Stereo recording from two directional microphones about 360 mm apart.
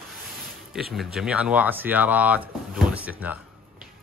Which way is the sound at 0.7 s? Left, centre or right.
Centre.